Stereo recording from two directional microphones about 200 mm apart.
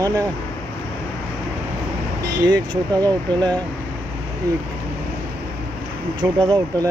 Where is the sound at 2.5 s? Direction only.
20° right (ahead or behind).